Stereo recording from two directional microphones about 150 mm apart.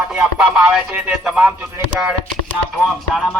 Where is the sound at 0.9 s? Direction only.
10° right (ahead or behind).